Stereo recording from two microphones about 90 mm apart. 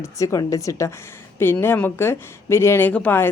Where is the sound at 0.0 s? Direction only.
35° left (ahead or behind).